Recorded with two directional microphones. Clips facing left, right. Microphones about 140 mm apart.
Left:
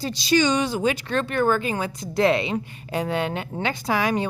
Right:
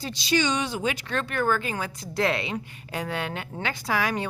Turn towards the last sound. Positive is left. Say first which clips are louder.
# left 4 dB
turn(degrees=20)  # may be behind; listen again after turning